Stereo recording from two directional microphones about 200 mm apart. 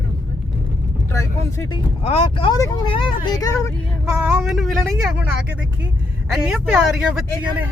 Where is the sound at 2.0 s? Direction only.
25° left (ahead or behind).